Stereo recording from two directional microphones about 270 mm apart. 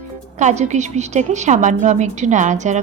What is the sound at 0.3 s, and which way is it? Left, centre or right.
A woman's voice, right.